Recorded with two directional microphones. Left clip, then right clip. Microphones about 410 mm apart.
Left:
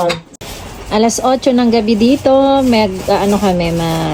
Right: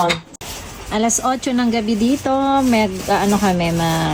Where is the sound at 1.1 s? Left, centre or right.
Left.